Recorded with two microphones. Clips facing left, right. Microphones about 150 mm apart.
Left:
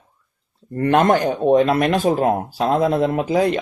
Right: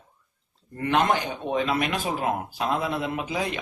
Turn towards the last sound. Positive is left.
turn(degrees=45)  # may be behind; listen again after turning